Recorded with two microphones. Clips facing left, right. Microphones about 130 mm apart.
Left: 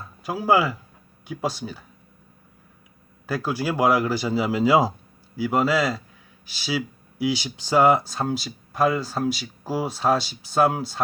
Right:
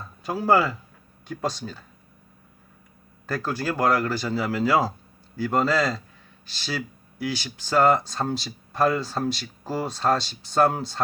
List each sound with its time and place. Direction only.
0.0 s speech: 5° left (ahead or behind)
3.2 s speech: 10° left (ahead or behind)